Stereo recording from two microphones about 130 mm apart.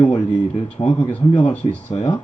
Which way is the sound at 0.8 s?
30° left (ahead or behind).